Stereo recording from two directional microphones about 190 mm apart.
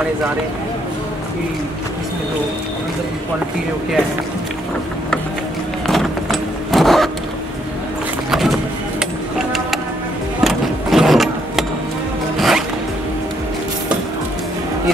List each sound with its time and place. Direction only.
5.9 s vehicle: centre (ahead or behind)
8.3 s vehicle: centre (ahead or behind)
10.4 s vehicle: centre (ahead or behind)
12.4 s zipper: centre (ahead or behind)